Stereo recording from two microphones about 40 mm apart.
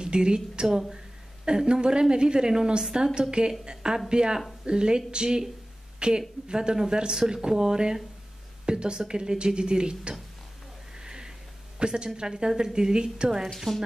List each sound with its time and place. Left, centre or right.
0.0 s a woman's voice: right
0.7 s a woman's voice: centre
1.4 s a woman's voice: right
11.0 s a sound: centre
11.8 s a woman's voice: right
13.7 s speech: centre